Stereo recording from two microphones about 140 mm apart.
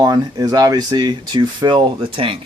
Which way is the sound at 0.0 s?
25° right (ahead or behind).